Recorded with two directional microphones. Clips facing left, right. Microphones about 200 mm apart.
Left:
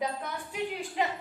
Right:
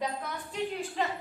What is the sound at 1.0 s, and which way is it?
Speech, 15° left (ahead or behind).